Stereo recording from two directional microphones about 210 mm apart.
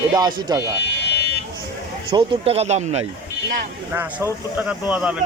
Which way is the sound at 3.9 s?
10° right (ahead or behind).